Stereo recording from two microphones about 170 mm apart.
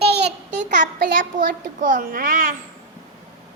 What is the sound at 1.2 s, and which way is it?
A child's voice, 50° right (ahead or behind).